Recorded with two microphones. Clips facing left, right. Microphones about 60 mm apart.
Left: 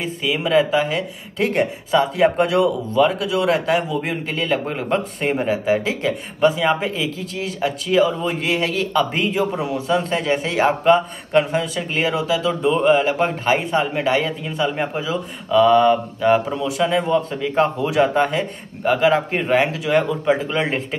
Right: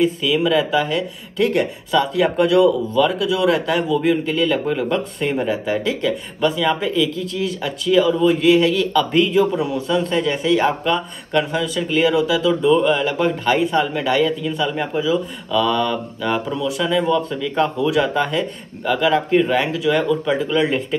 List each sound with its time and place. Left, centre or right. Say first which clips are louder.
0.0 s a man's voice: right 5 dB; left